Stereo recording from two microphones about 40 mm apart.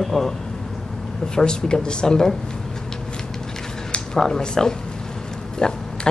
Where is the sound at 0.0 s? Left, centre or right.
Centre.